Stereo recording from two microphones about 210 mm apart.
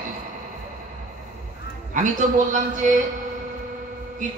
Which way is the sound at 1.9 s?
35° right (ahead or behind).